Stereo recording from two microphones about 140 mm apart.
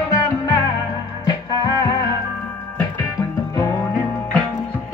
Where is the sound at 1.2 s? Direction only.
30° left (ahead or behind).